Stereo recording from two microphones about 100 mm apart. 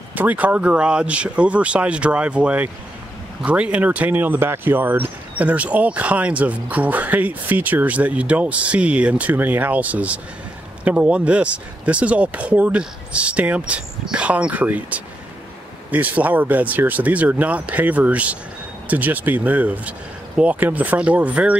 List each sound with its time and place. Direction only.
0.1 s speech: 15° right (ahead or behind)